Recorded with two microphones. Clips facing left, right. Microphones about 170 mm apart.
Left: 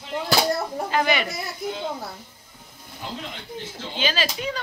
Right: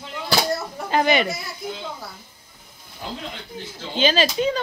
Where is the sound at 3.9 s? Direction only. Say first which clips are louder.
Right 7 dB; 25° right (ahead or behind).